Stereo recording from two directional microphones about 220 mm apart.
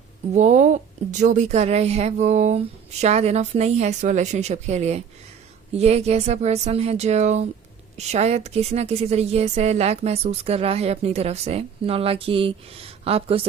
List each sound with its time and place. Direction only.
0.3 s a woman's voice: 30° right (ahead or behind)